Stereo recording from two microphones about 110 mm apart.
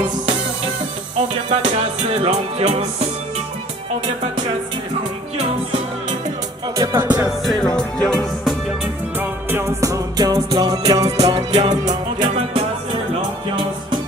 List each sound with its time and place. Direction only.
1.5 s music: 60° right (ahead or behind)
6.8 s music: 25° right (ahead or behind)
7.2 s music: centre (ahead or behind)
9.2 s music: 20° right (ahead or behind); by 12.3 s 40° right (ahead or behind)